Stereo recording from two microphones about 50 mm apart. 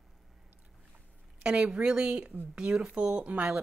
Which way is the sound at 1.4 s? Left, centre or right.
Right.